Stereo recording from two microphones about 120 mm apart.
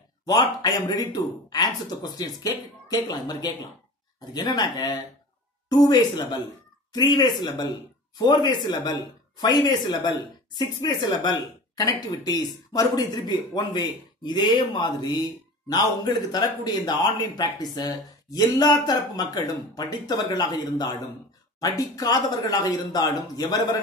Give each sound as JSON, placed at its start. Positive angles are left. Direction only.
{"t": 0.3, "sound": "speech", "side_deg": 30}